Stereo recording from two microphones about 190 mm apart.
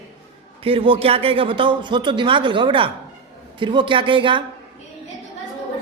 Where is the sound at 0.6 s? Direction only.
30° right (ahead or behind).